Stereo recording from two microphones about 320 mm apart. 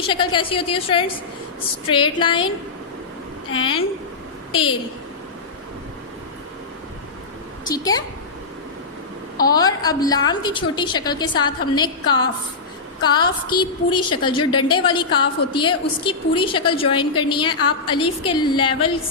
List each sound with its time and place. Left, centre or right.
0.0 s a woman's voice: centre
3.5 s a woman's voice: centre
7.7 s a woman's voice: centre
9.4 s a woman's voice: centre